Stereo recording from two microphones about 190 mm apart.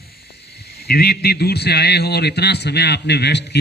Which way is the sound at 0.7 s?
55° left (ahead or behind).